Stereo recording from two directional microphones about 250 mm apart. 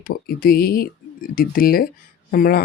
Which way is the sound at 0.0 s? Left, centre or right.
Left.